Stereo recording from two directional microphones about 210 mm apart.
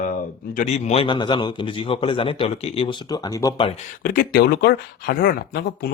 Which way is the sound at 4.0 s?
45° left (ahead or behind).